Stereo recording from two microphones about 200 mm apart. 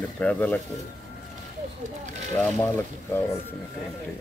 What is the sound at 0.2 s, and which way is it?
Speech, 5° left (ahead or behind).